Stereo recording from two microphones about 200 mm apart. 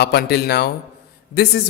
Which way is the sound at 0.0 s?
55° left (ahead or behind).